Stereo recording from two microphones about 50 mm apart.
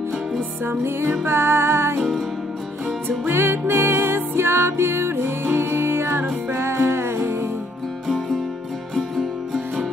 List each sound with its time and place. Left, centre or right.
0.7 s music: right
3.1 s music: right
8.9 s music: centre